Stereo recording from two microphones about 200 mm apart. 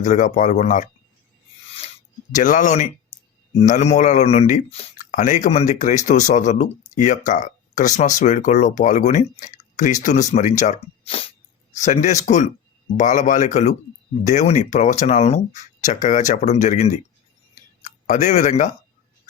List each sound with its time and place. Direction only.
0.0 s speech: 40° left (ahead or behind)
2.3 s speech: 40° left (ahead or behind)
11.0 s music: 30° left (ahead or behind)
11.7 s speech: 35° left (ahead or behind)